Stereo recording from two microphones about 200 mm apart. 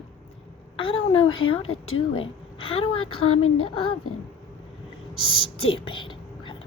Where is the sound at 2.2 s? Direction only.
25° left (ahead or behind).